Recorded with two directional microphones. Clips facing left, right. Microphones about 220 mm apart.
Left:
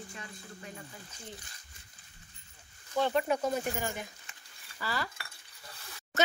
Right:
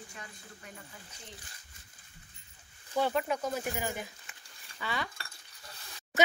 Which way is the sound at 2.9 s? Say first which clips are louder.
Left 1 dB; 5° right (ahead or behind).